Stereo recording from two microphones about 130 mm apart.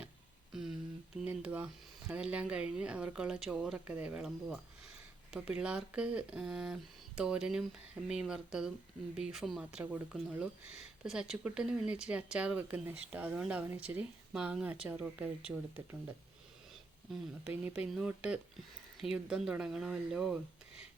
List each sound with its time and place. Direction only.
0.5 s a sound: 5° right (ahead or behind)
1.2 s speech: 10° right (ahead or behind)
17.4 s speech: 10° right (ahead or behind)